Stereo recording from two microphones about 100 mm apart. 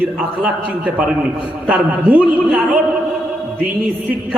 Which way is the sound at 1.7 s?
15° right (ahead or behind).